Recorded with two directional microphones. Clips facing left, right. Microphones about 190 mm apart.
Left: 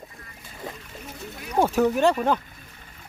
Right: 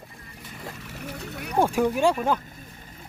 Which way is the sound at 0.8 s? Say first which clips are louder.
Right 3 dB; 70° right (ahead or behind).